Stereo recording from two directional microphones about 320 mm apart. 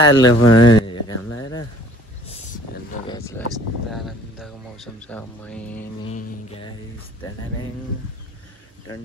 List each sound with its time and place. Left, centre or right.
0.0 s speech: centre
0.4 s speech: left
0.7 s a sound: centre
3.1 s speech: centre
3.9 s speech: centre
6.0 s music: centre